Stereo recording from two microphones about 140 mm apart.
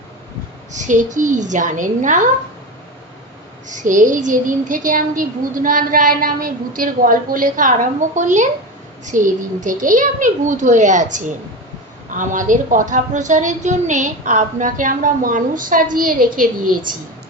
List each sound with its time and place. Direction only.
0.7 s a child's voice: 65° right (ahead or behind)
3.7 s a child's voice: 65° right (ahead or behind)